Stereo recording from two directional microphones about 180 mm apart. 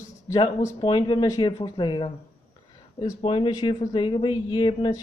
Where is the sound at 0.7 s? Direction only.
25° left (ahead or behind).